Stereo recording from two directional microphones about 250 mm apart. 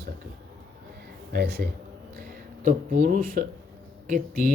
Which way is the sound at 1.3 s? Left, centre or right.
Right.